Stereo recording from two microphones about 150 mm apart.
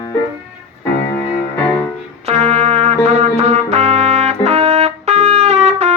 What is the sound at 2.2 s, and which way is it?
Trumpet, 45° right (ahead or behind).